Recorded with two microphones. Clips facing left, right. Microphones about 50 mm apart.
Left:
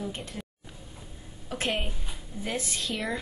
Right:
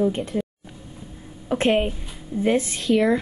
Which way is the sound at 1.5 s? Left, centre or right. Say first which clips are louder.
Right 11 dB; right.